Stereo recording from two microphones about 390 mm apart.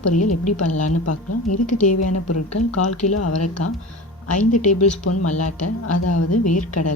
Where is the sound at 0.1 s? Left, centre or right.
Left.